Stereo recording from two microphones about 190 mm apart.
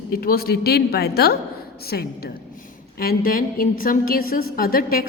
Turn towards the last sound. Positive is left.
turn(degrees=50)  # may be behind; listen again after turning